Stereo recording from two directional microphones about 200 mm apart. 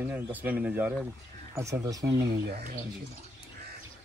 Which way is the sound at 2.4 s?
55° right (ahead or behind).